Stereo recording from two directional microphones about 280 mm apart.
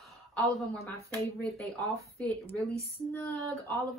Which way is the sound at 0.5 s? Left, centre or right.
Centre.